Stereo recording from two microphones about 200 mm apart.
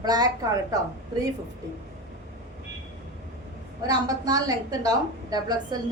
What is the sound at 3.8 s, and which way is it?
Speech, 20° right (ahead or behind).